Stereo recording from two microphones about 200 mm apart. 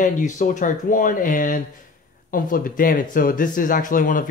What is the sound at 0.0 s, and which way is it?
Speech, 40° left (ahead or behind).